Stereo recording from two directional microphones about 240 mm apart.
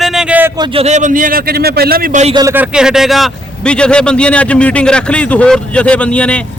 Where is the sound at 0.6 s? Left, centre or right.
Right.